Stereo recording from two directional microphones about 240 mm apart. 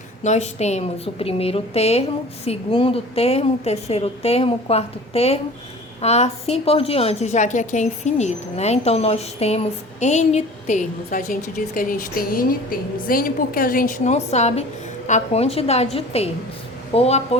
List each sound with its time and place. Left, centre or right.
0.2 s a woman's voice: left